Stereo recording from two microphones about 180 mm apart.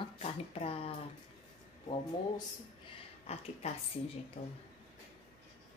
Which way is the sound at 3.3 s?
35° left (ahead or behind).